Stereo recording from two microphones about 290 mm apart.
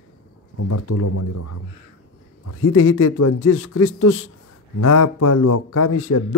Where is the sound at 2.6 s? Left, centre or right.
Left.